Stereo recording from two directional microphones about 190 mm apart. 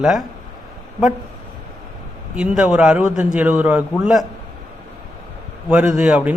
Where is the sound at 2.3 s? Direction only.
5° right (ahead or behind).